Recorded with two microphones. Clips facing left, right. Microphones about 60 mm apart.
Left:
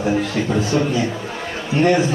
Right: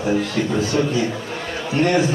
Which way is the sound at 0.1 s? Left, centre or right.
Centre.